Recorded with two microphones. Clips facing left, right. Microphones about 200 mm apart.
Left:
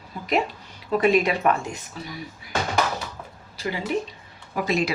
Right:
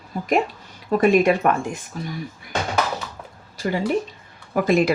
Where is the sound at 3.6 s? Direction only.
45° right (ahead or behind).